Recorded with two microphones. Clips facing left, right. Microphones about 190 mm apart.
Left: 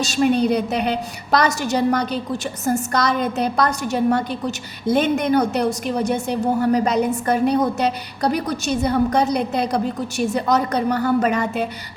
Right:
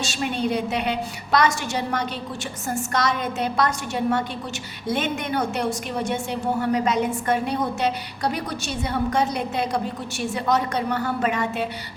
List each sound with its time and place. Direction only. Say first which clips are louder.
0.0 s a woman's voice: left 8 dB; 40° left (ahead or behind)